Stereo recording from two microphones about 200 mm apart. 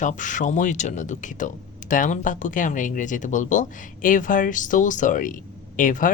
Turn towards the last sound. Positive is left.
turn(degrees=40)  # may be behind; listen again after turning